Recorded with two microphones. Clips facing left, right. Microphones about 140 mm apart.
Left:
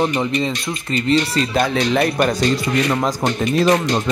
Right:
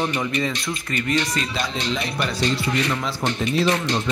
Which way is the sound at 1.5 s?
50° left (ahead or behind).